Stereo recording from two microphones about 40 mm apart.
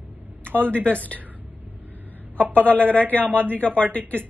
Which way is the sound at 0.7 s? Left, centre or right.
Left.